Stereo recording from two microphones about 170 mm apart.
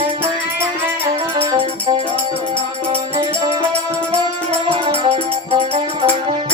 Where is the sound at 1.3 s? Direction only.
30° right (ahead or behind).